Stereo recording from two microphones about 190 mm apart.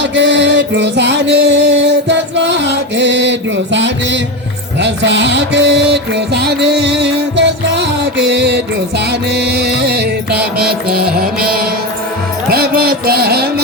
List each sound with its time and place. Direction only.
0.0 s music: 70° right (ahead or behind)
11.0 s mantra: 50° right (ahead or behind)
12.5 s music: 55° right (ahead or behind)